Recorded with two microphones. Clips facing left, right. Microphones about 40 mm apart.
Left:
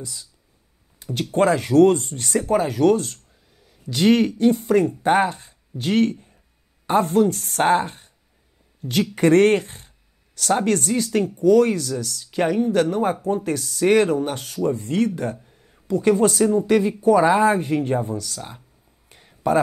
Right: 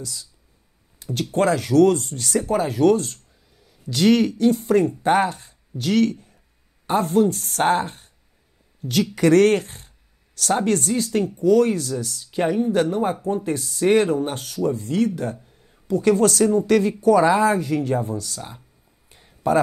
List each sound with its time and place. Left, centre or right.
0.0 s speech: left
1.3 s speech: left
6.9 s speech: left
15.9 s speech: left
18.1 s speech: left
19.0 s a sound: left